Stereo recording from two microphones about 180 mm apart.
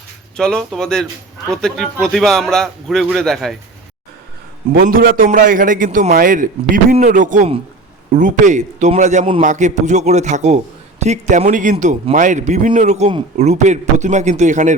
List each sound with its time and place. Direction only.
0.3 s a man's voice: 5° left (ahead or behind)
4.7 s a man's voice: 55° right (ahead or behind)